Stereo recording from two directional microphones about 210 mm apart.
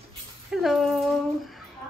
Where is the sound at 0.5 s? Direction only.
Centre (ahead or behind).